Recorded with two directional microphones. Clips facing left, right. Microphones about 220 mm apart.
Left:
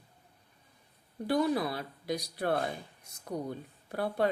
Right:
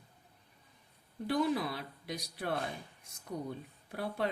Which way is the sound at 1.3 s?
40° left (ahead or behind).